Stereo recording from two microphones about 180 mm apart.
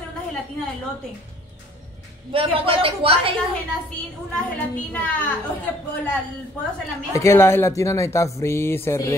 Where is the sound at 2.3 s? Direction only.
30° right (ahead or behind).